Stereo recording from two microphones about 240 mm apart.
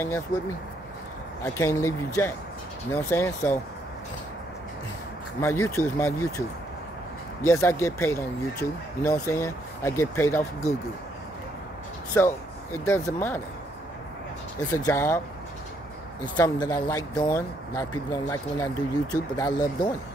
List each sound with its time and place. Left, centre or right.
0.3 s speech: left
1.4 s speech: centre
5.4 s speech: centre
7.4 s speech: centre
12.1 s speech: centre
14.6 s speech: centre
16.3 s speech: centre